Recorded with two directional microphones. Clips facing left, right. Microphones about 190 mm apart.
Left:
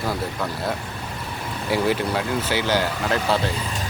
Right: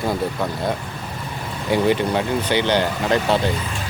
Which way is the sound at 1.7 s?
5° left (ahead or behind).